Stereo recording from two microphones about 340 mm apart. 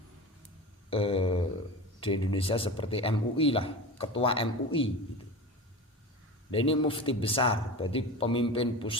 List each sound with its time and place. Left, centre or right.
0.9 s a sound: centre
2.0 s speech: centre
6.5 s speech: centre